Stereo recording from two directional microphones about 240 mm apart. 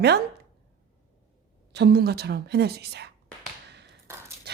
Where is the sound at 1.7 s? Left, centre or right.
Right.